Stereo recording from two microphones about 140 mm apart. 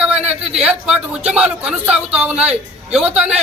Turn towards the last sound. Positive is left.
turn(degrees=-5)  # may be behind; listen again after turning